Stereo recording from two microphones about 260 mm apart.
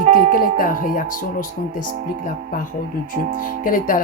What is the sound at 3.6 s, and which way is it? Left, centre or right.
Speech, left.